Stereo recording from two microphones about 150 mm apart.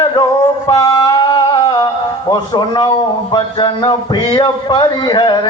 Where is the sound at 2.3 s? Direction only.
30° left (ahead or behind).